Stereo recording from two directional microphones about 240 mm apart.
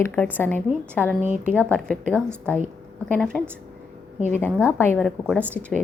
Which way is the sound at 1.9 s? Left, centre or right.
Centre.